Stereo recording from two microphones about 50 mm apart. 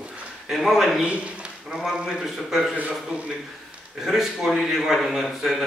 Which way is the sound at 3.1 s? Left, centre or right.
Right.